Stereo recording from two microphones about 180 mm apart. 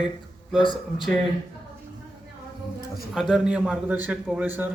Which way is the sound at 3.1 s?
5° right (ahead or behind).